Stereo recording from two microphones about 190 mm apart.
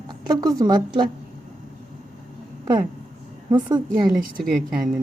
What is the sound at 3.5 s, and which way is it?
Speech, 25° right (ahead or behind).